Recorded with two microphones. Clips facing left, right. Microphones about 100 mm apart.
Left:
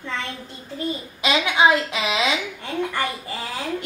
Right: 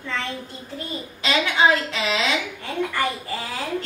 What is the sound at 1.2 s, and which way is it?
A woman's voice, 15° left (ahead or behind).